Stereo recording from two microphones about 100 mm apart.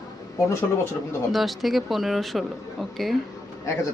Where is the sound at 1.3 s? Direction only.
Centre (ahead or behind).